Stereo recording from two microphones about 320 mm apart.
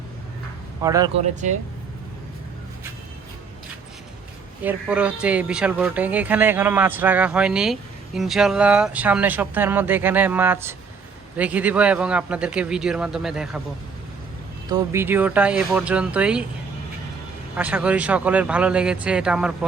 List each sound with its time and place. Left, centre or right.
0.8 s a man's voice: centre
1.2 s speech: right
4.6 s speech: centre
14.7 s speech: centre
17.6 s speech: centre